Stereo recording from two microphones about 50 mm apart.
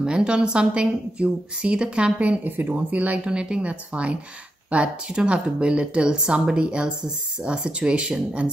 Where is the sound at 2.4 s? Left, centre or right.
Right.